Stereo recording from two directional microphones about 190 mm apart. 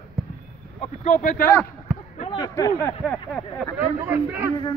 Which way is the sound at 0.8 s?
40° left (ahead or behind).